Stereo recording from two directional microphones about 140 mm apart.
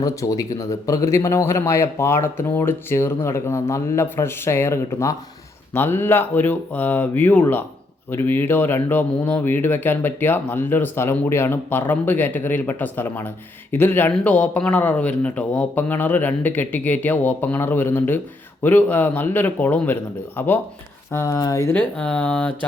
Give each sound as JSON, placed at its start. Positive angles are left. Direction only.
{"t": 0.0, "sound": "speech", "side_deg": 25}